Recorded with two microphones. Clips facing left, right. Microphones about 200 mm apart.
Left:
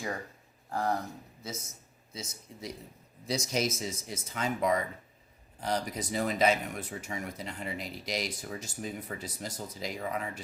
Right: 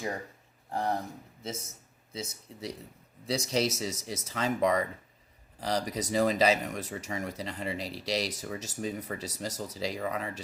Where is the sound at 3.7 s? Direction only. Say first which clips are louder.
Right 2 dB; 80° right.